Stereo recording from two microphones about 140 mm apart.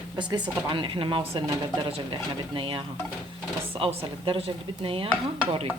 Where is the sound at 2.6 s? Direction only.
40° right (ahead or behind).